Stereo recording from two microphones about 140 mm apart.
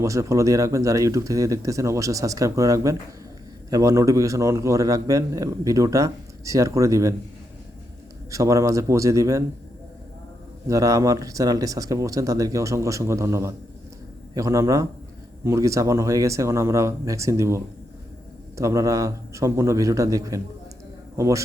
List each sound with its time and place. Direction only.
0.0 s a man's voice: 20° right (ahead or behind)
8.3 s a man's voice: 20° right (ahead or behind)
10.7 s a man's voice: 25° right (ahead or behind)